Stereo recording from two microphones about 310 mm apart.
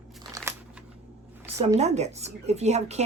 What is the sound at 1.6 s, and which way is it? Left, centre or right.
Speech, right.